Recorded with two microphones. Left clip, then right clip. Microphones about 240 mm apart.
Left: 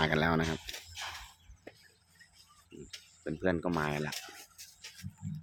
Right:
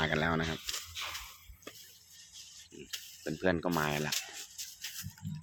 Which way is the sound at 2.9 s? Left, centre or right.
Right.